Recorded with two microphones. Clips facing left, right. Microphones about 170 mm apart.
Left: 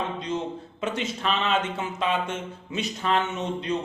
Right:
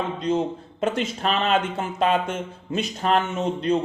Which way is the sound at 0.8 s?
45° right (ahead or behind).